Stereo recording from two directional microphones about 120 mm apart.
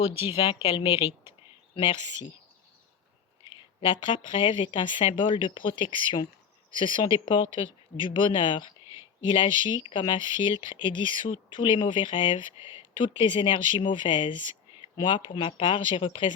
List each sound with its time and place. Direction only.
0.3 s speech: 45° left (ahead or behind)
3.4 s speech: 45° left (ahead or behind)
8.9 s a sound: 20° right (ahead or behind)
9.3 s speech: 40° left (ahead or behind)